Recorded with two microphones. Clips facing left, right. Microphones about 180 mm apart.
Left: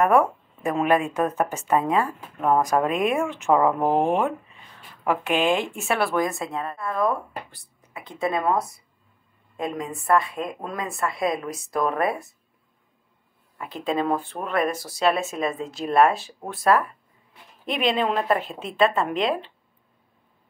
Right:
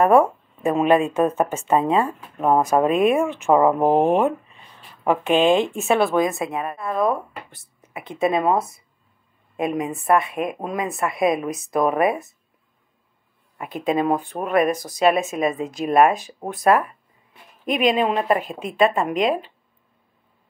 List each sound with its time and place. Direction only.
0.0 s speech: 25° right (ahead or behind)
13.6 s speech: 15° right (ahead or behind)